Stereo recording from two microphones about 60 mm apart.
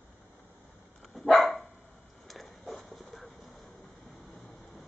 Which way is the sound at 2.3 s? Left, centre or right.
Centre.